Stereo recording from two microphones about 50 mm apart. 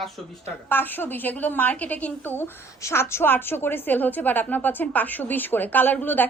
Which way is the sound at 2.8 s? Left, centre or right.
Left.